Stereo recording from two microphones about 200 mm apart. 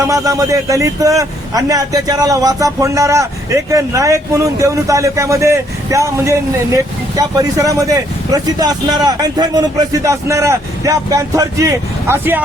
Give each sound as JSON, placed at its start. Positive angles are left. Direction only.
{"t": 0.1, "sound": "a man's voice", "side_deg": -15}